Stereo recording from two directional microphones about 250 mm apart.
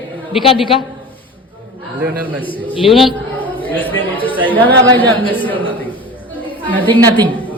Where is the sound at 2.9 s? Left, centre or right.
Centre.